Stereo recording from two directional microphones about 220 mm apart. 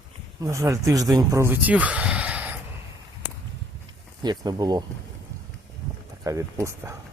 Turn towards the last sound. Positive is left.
turn(degrees=-15)  # may be behind; listen again after turning